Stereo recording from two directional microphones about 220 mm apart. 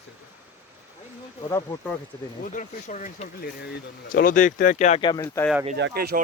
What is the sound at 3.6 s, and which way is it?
Speech, 45° left (ahead or behind).